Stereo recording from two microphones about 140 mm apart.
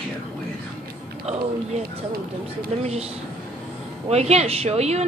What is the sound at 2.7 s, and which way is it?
Speech, 50° right (ahead or behind).